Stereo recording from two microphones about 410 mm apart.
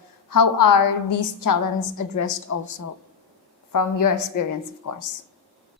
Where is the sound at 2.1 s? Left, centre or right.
Left.